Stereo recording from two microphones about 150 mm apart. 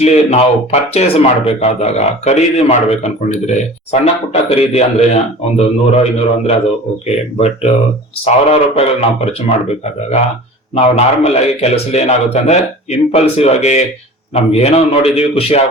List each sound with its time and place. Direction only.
0.0 s speech: 45° left (ahead or behind)
7.3 s speech: 45° left (ahead or behind)